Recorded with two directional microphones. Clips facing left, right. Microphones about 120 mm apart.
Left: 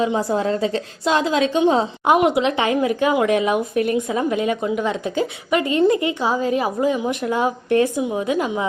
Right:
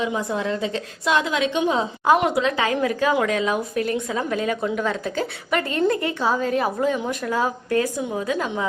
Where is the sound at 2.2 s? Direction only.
20° left (ahead or behind).